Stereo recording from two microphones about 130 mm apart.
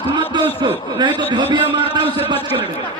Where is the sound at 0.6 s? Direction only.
35° right (ahead or behind).